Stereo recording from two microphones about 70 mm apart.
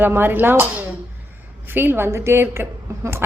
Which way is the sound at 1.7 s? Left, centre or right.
Right.